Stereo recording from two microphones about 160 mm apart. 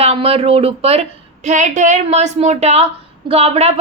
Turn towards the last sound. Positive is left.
turn(degrees=-40)  # may be behind; listen again after turning